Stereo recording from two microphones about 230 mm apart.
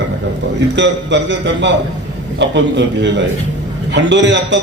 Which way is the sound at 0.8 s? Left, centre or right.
Right.